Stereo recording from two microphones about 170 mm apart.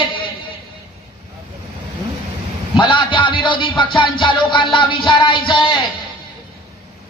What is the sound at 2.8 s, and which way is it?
Music, 30° left (ahead or behind).